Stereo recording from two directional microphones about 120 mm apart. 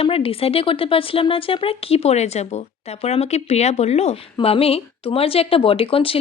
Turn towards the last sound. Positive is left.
turn(degrees=50)  # may be behind; listen again after turning